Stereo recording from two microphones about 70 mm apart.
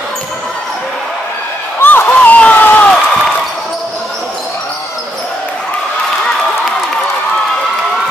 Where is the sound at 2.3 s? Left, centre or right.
Left.